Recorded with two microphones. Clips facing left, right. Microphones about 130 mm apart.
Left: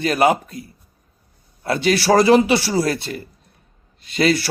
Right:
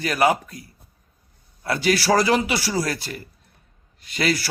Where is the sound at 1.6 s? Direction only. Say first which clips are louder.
Left 3 dB; 25° left (ahead or behind).